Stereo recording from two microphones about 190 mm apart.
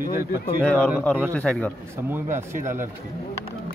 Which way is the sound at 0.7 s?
5° left (ahead or behind).